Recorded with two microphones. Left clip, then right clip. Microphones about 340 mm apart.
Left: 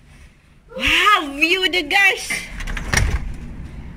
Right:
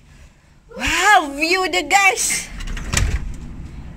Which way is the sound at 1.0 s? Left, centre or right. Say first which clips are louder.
Right 3 dB; right.